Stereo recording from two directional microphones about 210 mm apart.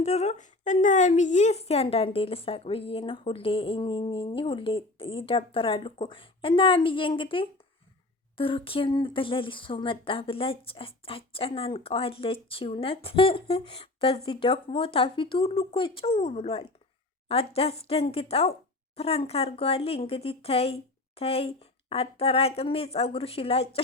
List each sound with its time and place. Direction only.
0.0 s a woman's voice: 30° left (ahead or behind)